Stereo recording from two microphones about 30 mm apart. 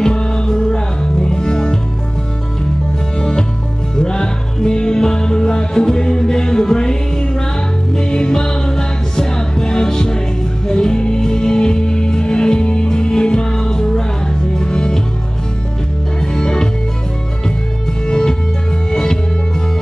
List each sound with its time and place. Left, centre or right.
0.0 s music: left
3.2 s music: left
16.2 s music: left
18.0 s music: left